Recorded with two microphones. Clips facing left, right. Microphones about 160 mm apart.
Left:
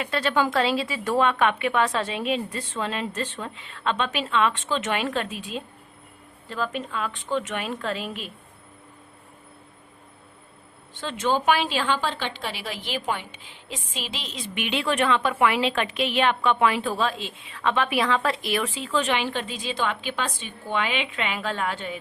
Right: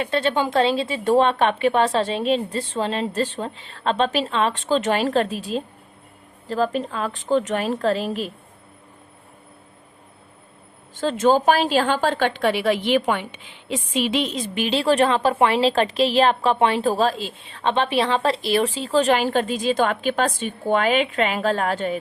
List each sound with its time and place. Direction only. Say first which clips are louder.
0.0 s a woman's voice: right 3 dB; 25° right (ahead or behind)
10.9 s a woman's voice: right 7 dB; 40° right (ahead or behind); by 14.3 s 60° right (ahead or behind)
14.3 s a woman's voice: right 6 dB; 40° right (ahead or behind)